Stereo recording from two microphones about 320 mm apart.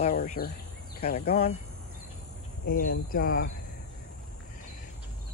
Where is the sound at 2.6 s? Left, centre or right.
Left.